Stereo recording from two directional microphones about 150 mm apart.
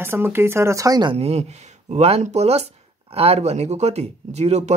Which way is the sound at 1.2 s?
45° right (ahead or behind).